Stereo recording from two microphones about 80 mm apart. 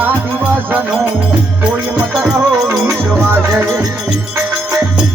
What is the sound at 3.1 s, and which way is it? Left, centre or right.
Music, right.